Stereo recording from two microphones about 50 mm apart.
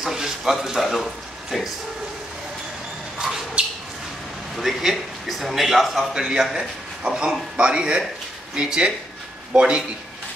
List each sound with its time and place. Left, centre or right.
0.0 s speech: centre
3.2 s a sound: centre
4.6 s a man's voice: centre